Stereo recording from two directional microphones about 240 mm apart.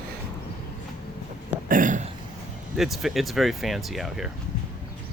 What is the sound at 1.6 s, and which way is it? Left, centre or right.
Speech, right.